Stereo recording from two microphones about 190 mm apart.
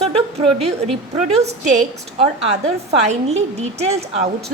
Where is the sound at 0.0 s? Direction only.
30° right (ahead or behind).